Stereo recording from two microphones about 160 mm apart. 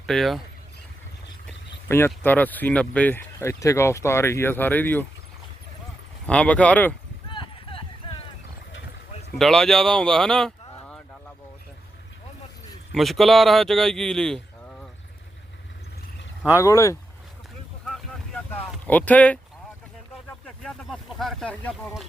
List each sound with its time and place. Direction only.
0.0 s speech: centre (ahead or behind)
1.9 s speech: 15° left (ahead or behind)
6.2 s speech: 5° left (ahead or behind)
7.3 s clip-clop: 30° left (ahead or behind)
9.4 s speech: 5° left (ahead or behind)
12.9 s speech: centre (ahead or behind)
16.5 s speech: 20° left (ahead or behind)
18.9 s speech: 10° left (ahead or behind)
20.6 s speech: 5° left (ahead or behind)